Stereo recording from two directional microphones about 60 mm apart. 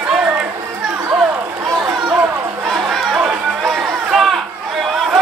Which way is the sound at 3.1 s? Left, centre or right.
Centre.